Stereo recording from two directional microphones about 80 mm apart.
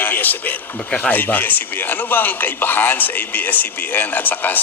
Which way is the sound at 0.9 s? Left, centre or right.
Centre.